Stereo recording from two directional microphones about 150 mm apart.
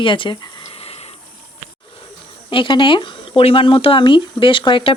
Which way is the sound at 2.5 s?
35° left (ahead or behind).